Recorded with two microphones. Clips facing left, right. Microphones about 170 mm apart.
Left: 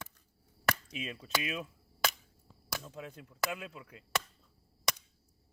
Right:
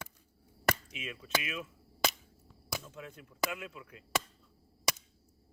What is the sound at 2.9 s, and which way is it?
Speech, 35° left (ahead or behind).